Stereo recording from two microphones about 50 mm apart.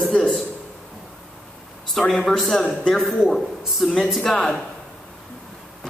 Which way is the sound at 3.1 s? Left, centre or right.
Centre.